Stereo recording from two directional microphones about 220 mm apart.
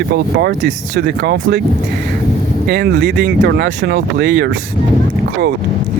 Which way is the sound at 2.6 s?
45° right (ahead or behind).